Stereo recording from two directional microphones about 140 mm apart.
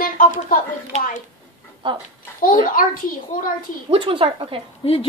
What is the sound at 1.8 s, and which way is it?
Speech, 35° right (ahead or behind).